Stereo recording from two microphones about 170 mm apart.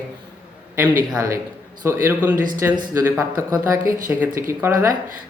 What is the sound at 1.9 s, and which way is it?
A man's voice, 10° right (ahead or behind).